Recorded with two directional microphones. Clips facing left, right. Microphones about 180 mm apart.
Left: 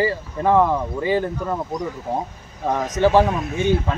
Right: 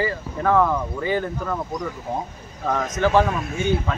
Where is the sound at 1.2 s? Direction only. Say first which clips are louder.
Left 2 dB; 15° left (ahead or behind).